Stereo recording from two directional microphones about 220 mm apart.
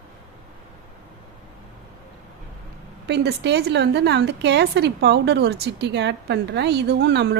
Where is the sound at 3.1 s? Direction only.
50° right (ahead or behind).